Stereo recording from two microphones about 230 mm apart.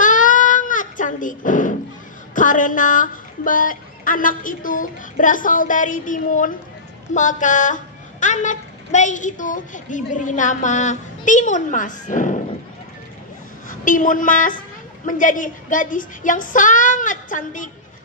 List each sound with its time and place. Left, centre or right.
0.0 s a sound: left
2.3 s a woman's voice: left
13.7 s a woman's voice: left